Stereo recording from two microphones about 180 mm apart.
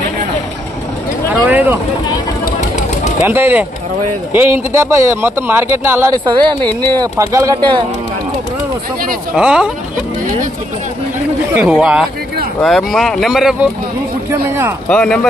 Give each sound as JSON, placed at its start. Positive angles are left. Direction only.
{"t": 1.4, "sound": "a sound", "side_deg": -10}
{"t": 3.2, "sound": "speech", "side_deg": -10}
{"t": 9.4, "sound": "speech", "side_deg": -5}
{"t": 11.5, "sound": "speech", "side_deg": -5}
{"t": 14.9, "sound": "speech", "side_deg": 5}